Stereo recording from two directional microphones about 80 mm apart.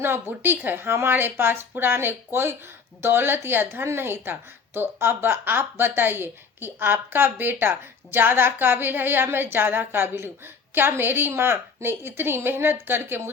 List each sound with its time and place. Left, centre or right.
0.0 s a woman's voice: right